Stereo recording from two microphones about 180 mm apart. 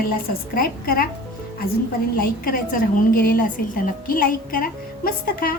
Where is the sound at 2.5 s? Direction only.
50° left (ahead or behind).